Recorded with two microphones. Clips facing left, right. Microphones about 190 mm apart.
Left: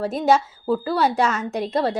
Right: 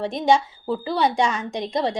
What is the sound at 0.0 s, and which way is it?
A woman's voice, centre (ahead or behind).